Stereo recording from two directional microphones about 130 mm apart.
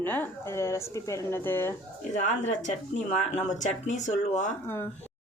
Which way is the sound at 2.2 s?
65° left (ahead or behind).